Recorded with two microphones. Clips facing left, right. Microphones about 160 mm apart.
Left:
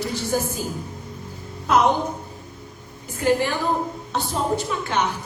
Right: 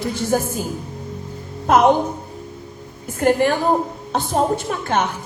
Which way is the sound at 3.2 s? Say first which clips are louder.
Right 4 dB; 55° right (ahead or behind).